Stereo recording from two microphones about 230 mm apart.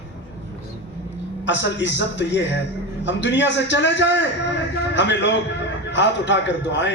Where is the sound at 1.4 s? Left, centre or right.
Left.